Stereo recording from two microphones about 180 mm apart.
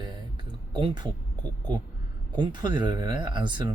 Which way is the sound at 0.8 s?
30° right (ahead or behind).